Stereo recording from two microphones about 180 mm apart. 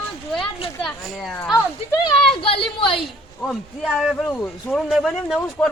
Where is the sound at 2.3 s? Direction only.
30° left (ahead or behind).